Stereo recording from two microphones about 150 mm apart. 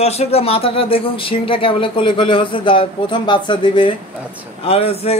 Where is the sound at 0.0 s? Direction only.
45° left (ahead or behind).